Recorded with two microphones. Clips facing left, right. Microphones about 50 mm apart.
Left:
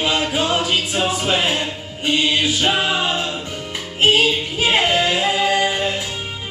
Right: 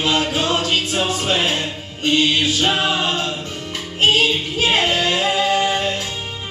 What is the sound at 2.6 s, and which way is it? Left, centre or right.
Choir, centre.